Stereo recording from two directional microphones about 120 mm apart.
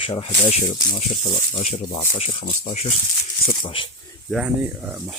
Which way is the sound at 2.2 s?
55° left (ahead or behind).